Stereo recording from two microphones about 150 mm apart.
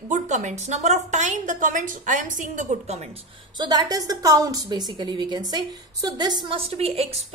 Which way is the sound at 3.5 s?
30° right (ahead or behind).